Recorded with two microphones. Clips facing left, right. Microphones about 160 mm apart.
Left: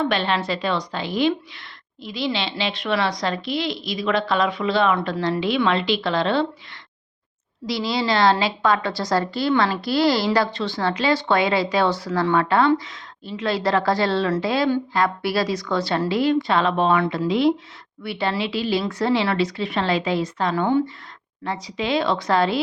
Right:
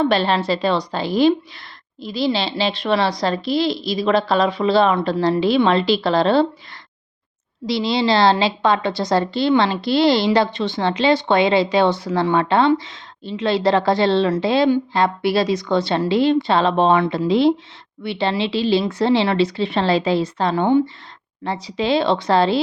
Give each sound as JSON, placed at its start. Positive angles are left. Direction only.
{"t": 0.0, "sound": "a woman's voice", "side_deg": -35}
{"t": 7.7, "sound": "a woman's voice", "side_deg": -25}